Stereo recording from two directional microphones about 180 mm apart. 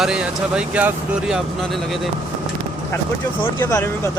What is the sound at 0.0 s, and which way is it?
Speech, 5° right (ahead or behind).